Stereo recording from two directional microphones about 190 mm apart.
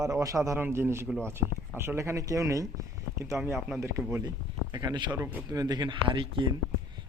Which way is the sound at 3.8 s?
15° right (ahead or behind).